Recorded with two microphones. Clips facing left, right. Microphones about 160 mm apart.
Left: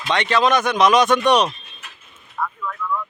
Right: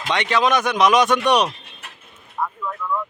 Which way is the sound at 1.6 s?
60° right (ahead or behind).